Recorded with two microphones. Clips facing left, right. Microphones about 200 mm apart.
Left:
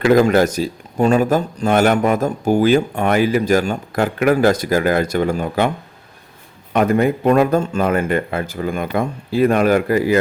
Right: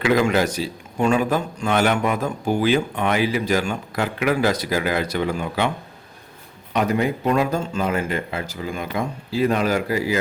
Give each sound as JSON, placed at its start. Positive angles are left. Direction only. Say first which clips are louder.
{"t": 0.0, "sound": "speech", "louder": "left 6 dB", "side_deg": 45}
{"t": 6.7, "sound": "speech", "louder": "left 5 dB", "side_deg": 50}